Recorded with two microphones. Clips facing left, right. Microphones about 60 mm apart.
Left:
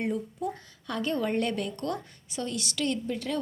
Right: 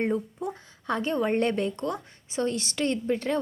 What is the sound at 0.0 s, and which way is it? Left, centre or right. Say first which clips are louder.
A woman's voice: right 3 dB; right.